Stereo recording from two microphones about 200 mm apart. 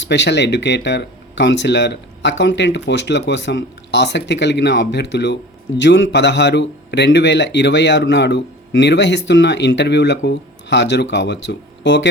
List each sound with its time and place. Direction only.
0.0 s speech: 60° left (ahead or behind)